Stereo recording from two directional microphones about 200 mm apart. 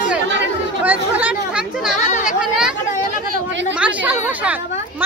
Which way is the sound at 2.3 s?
5° right (ahead or behind).